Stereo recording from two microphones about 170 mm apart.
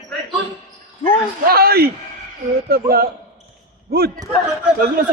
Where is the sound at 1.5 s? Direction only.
65° right (ahead or behind).